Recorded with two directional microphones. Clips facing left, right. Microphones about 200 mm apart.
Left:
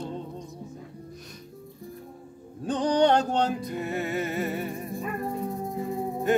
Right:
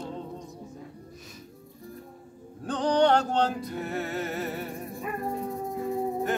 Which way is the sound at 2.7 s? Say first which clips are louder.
Left 1 dB; 15° left (ahead or behind).